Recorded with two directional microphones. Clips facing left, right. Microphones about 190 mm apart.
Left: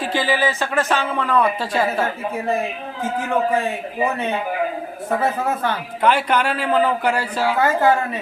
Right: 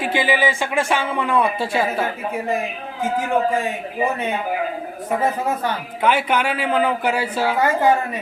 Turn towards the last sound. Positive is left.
turn(degrees=-10)  # may be behind; listen again after turning